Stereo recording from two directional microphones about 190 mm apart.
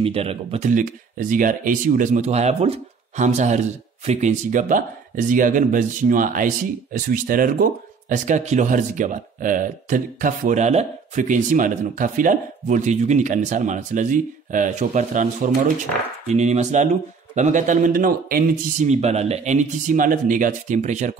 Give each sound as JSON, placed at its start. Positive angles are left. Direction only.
{"t": 0.0, "sound": "a man's voice", "side_deg": -30}